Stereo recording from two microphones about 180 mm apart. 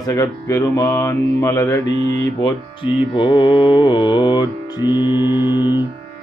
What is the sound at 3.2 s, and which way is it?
Speech, 25° left (ahead or behind).